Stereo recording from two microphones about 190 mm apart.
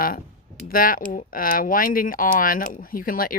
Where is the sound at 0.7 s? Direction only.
50° left (ahead or behind).